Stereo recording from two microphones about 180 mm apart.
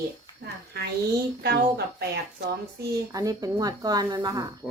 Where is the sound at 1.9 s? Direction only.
65° right (ahead or behind).